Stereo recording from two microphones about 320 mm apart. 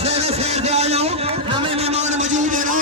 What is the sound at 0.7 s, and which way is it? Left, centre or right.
Vehicle, centre.